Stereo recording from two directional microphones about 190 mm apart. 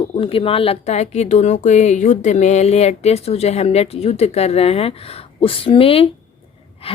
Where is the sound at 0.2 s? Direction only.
30° left (ahead or behind).